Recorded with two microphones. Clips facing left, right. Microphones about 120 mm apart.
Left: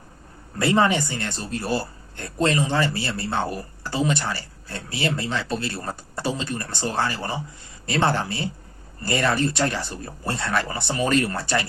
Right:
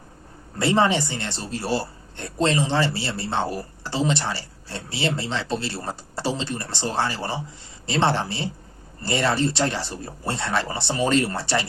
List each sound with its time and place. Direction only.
0.6 s a man's voice: 25° right (ahead or behind)